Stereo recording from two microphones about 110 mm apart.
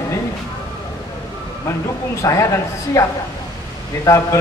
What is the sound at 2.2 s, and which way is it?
A man's voice, 25° left (ahead or behind).